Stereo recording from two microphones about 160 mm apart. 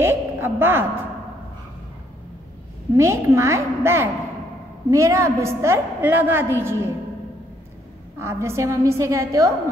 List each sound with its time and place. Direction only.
0.0 s a sound: 15° right (ahead or behind)
3.0 s a woman's voice: 15° right (ahead or behind)
8.2 s a woman's voice: 15° right (ahead or behind)